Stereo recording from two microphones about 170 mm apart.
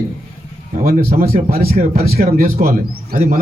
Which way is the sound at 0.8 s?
60° right (ahead or behind).